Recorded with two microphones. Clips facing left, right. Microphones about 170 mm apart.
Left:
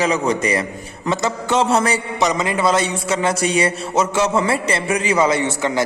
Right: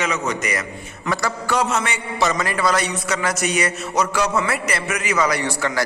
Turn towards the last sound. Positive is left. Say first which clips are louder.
# left 3 dB
turn(degrees=20)  # may be behind; listen again after turning